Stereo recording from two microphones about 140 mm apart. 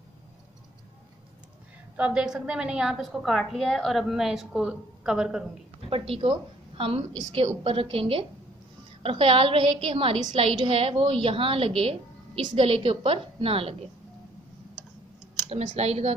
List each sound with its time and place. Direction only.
2.0 s a woman's voice: 5° right (ahead or behind)
5.9 s a woman's voice: 40° right (ahead or behind)
15.7 s speech: 50° right (ahead or behind)